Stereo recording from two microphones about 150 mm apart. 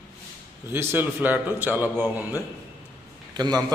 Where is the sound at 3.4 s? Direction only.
30° right (ahead or behind).